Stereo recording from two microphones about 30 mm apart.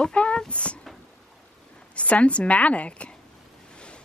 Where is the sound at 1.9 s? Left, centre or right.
Left.